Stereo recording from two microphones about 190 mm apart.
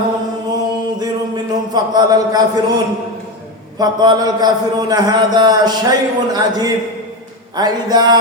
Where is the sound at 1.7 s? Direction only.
20° right (ahead or behind).